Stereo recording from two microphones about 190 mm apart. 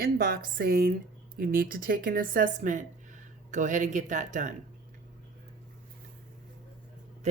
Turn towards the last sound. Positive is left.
turn(degrees=-35)  # may be behind; listen again after turning